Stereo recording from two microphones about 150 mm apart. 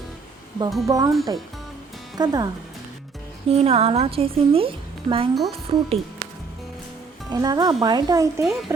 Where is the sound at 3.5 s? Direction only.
40° right (ahead or behind).